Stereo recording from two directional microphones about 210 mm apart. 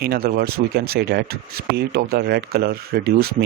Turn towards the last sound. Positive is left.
turn(degrees=-45)  # may be behind; listen again after turning